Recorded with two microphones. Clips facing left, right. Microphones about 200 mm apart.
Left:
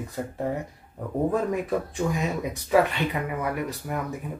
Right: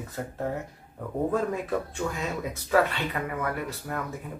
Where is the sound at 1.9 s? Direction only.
15° left (ahead or behind).